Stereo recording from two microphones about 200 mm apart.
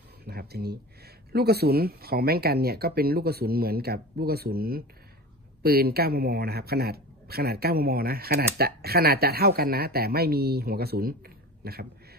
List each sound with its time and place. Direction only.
0.2 s speech: 50° right (ahead or behind)